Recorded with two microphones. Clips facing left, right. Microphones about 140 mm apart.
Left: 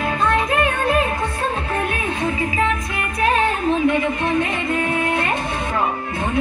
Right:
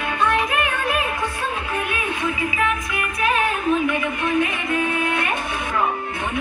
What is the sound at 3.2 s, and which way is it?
Music, 30° left (ahead or behind).